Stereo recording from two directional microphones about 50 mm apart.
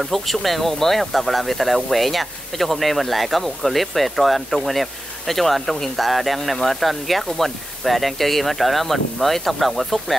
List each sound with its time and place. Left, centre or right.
0.0 s speech: centre